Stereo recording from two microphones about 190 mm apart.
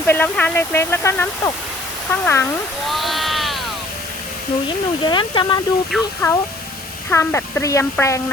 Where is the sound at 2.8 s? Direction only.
Centre (ahead or behind).